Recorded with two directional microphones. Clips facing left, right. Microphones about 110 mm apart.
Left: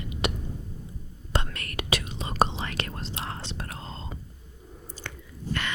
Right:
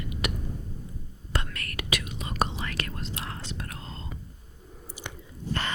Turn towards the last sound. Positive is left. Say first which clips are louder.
# even
turn(degrees=-35)  # may be behind; listen again after turning